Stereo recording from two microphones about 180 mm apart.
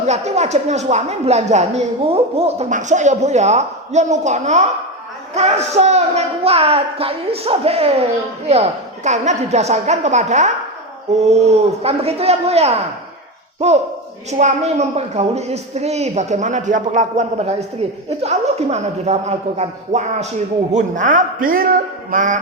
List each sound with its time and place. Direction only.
0.0 s speech: 40° right (ahead or behind)
9.0 s a man's voice: 40° right (ahead or behind)